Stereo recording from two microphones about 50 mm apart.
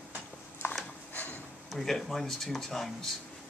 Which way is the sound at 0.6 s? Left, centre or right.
Left.